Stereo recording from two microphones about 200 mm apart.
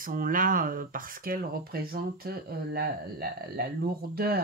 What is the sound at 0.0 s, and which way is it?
Speech, 45° right (ahead or behind).